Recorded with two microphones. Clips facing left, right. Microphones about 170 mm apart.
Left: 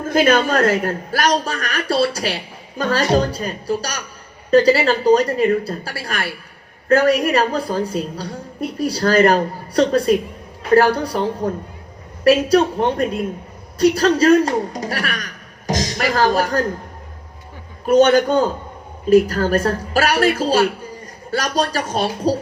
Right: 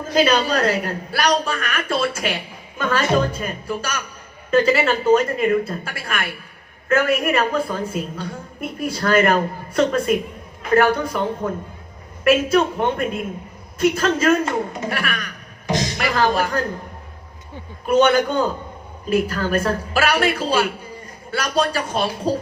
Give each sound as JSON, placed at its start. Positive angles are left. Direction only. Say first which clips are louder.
{"t": 0.0, "sound": "a man's voice", "louder": "left 2 dB", "side_deg": 50}
{"t": 12.2, "sound": "a man's voice", "louder": "left 3 dB", "side_deg": 35}
{"t": 17.8, "sound": "a man's voice", "louder": "left 3 dB", "side_deg": 40}